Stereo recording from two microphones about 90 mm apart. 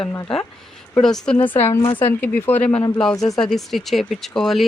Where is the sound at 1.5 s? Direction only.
25° left (ahead or behind).